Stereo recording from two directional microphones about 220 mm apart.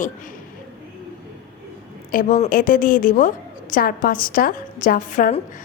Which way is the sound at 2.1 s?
35° left (ahead or behind).